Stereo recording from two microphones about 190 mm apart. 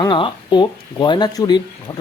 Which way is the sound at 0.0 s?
25° left (ahead or behind).